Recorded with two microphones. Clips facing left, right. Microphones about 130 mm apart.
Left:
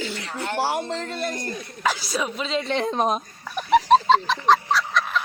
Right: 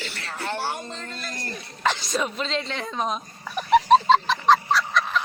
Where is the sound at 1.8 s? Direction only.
5° left (ahead or behind).